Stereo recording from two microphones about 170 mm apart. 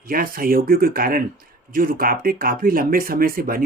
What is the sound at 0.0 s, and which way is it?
Speech, 55° right (ahead or behind).